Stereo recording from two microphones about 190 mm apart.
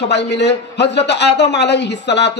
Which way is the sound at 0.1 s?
65° left (ahead or behind).